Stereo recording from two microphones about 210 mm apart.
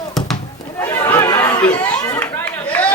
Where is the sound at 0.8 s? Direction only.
10° left (ahead or behind).